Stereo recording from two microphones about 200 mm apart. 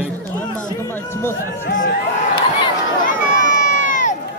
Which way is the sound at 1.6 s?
40° left (ahead or behind).